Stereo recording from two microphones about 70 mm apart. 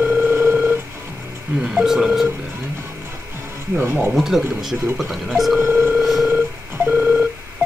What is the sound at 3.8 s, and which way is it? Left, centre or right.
Speech, right.